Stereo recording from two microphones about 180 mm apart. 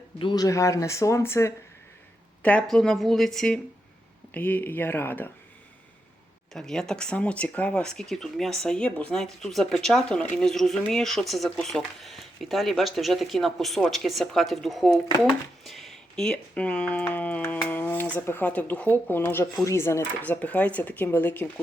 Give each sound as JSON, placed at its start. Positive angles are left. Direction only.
{"t": 0.2, "sound": "speech", "side_deg": 25}
{"t": 6.5, "sound": "speech", "side_deg": 0}